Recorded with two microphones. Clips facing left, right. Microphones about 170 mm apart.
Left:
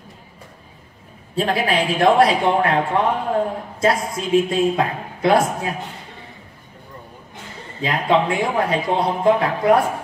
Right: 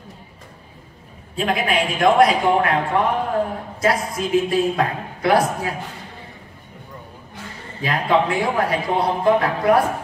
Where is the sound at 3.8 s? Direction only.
25° left (ahead or behind).